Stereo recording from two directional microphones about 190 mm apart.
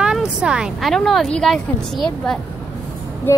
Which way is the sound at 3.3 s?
10° left (ahead or behind).